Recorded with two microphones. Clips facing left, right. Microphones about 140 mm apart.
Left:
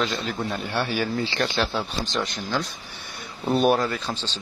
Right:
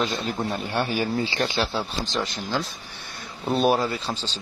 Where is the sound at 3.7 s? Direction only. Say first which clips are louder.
Left 1 dB; 10° right (ahead or behind).